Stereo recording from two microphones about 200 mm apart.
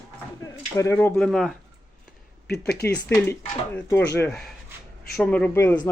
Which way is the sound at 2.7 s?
10° left (ahead or behind).